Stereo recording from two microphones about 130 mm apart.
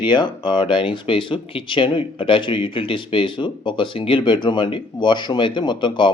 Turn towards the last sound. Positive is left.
turn(degrees=40)  # may be behind; listen again after turning